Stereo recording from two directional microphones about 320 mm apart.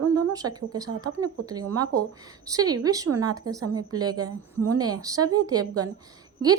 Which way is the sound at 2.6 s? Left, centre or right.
Right.